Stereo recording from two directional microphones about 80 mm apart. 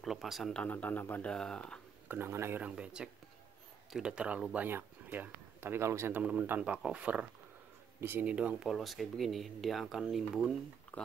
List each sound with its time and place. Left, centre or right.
0.0 s speech: centre
0.7 s speech: left
1.3 s speech: centre
2.0 s speech: right
2.6 s speech: centre
4.6 s speech: right
6.1 s speech: centre
8.0 s speech: right
8.3 s speech: centre
8.6 s speech: centre